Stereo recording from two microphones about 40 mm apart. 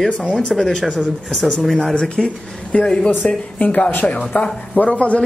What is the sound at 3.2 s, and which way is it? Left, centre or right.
Speech, left.